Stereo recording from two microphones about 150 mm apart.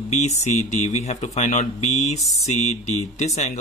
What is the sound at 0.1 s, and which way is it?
Speech, 50° left (ahead or behind).